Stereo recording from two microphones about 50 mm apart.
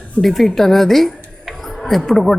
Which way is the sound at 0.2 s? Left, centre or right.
Centre.